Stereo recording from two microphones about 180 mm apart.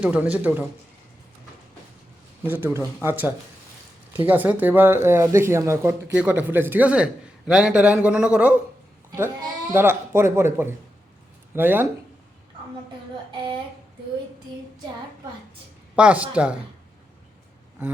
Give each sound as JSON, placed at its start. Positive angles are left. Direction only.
{"t": 0.0, "sound": "speech", "side_deg": -10}
{"t": 2.4, "sound": "speech", "side_deg": -10}
{"t": 9.7, "sound": "speech", "side_deg": -10}
{"t": 13.3, "sound": "speech", "side_deg": -25}
{"t": 16.0, "sound": "speech", "side_deg": -5}